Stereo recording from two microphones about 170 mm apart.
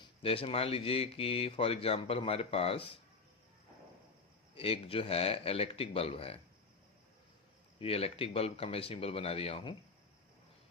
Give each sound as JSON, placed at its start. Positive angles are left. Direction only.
{"t": 0.0, "sound": "speech", "side_deg": 35}
{"t": 4.5, "sound": "speech", "side_deg": 35}
{"t": 7.8, "sound": "speech", "side_deg": 35}